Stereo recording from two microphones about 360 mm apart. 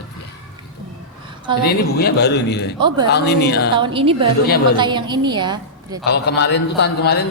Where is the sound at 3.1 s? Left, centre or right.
Left.